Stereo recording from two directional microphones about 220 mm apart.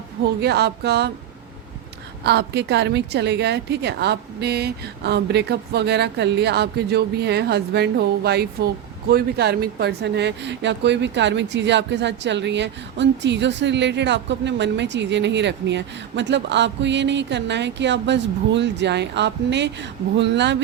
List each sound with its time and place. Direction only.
0.4 s speech: 50° right (ahead or behind)
2.2 s speech: 50° right (ahead or behind)